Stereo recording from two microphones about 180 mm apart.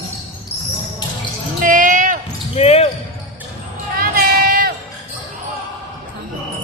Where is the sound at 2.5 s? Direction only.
35° left (ahead or behind).